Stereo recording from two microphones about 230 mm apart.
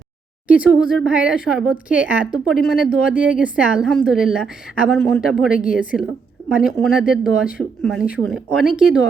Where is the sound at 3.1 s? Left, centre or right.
Left.